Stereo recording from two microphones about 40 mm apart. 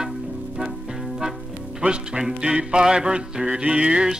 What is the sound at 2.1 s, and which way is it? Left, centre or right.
Music, centre.